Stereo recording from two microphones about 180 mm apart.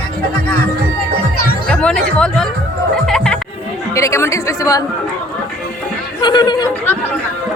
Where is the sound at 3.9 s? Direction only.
15° left (ahead or behind).